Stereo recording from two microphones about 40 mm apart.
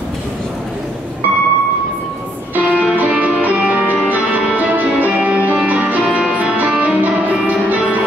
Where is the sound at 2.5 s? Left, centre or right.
Right.